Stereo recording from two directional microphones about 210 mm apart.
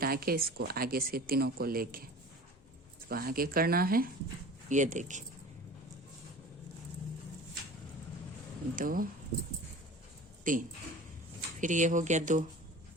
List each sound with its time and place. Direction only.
0.0 s speech: 45° right (ahead or behind)
3.1 s speech: 45° right (ahead or behind)
8.7 s speech: 40° right (ahead or behind)
10.5 s speech: 40° right (ahead or behind)
11.6 s speech: 35° right (ahead or behind)